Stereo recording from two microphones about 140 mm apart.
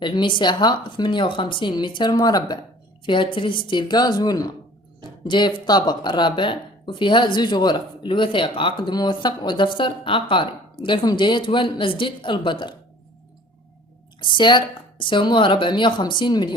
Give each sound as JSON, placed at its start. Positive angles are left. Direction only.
{"t": 0.0, "sound": "speech", "side_deg": 35}
{"t": 14.2, "sound": "speech", "side_deg": 35}